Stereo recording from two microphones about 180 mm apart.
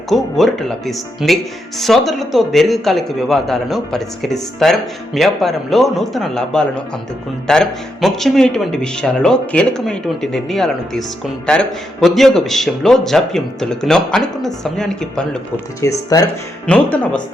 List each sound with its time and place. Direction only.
0.1 s speech: centre (ahead or behind)
15.8 s speech: 20° left (ahead or behind)
16.6 s speech: 10° left (ahead or behind)